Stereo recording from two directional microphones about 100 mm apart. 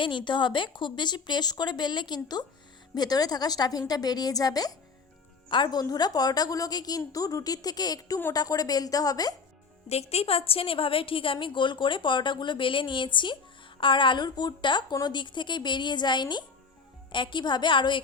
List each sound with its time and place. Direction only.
0.0 s a woman's voice: 55° left (ahead or behind); by 9.3 s 40° left (ahead or behind)
9.9 s a woman's voice: 90° left; by 18.0 s 55° left (ahead or behind)